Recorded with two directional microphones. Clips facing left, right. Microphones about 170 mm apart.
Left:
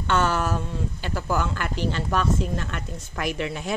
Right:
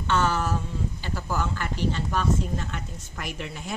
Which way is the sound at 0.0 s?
60° left (ahead or behind).